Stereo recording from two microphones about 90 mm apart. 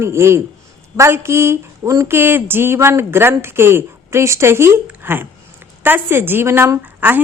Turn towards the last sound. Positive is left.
turn(degrees=-20)  # may be behind; listen again after turning